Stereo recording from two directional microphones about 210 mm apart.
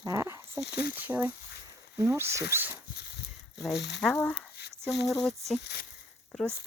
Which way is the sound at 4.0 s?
5° left (ahead or behind).